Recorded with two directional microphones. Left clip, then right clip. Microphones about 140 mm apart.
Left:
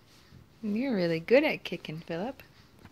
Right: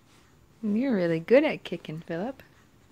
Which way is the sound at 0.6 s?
30° right (ahead or behind).